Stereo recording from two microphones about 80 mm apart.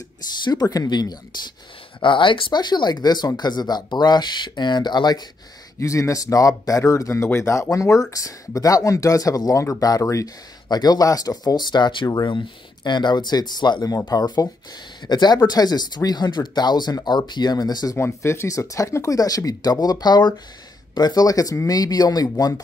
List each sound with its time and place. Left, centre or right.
0.4 s speech: left
2.0 s speech: left
5.8 s speech: left
10.7 s speech: left
17.9 s speech: left